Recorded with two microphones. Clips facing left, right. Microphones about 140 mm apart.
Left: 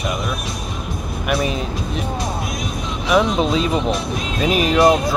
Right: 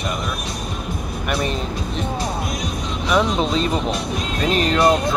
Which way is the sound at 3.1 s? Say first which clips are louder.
Left 2 dB; 5° left (ahead or behind).